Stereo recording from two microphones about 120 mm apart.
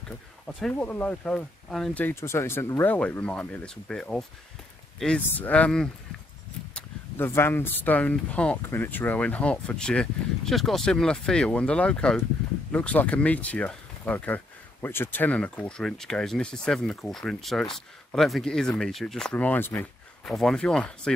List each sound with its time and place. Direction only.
0.6 s speech: 10° left (ahead or behind)
2.0 s speech: 20° left (ahead or behind)
20.2 s speech: 5° left (ahead or behind)